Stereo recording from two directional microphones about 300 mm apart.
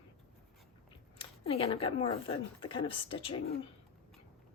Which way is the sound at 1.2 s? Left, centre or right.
Centre.